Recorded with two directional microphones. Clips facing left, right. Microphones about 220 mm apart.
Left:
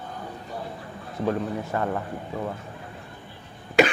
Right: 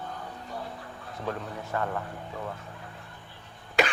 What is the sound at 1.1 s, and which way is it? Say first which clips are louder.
Speech: left 9 dB; 10° left (ahead or behind).